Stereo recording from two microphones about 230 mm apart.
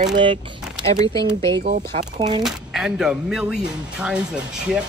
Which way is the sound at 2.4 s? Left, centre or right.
Centre.